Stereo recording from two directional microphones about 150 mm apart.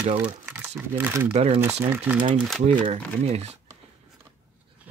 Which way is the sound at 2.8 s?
45° right (ahead or behind).